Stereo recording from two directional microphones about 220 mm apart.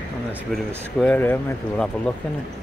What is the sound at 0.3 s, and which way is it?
Speech, centre (ahead or behind).